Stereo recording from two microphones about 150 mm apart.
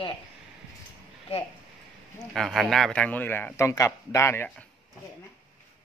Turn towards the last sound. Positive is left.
turn(degrees=15)  # may be behind; listen again after turning